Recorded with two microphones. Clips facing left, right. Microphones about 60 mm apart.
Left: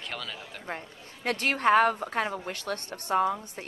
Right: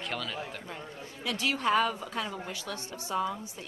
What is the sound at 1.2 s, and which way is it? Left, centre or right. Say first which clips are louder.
A woman's voice: left 4 dB; left.